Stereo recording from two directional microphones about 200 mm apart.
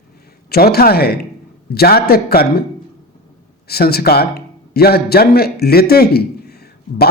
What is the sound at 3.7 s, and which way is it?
A man's voice, 50° left (ahead or behind).